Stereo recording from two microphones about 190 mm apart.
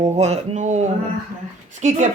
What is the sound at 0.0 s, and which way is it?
Speech, 35° right (ahead or behind).